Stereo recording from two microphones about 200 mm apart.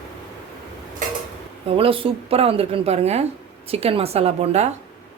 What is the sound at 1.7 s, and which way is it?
A woman's voice, 25° right (ahead or behind).